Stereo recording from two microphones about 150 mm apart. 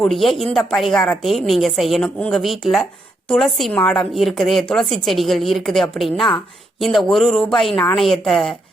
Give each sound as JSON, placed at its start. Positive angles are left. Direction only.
{"t": 0.0, "sound": "a woman's voice", "side_deg": 0}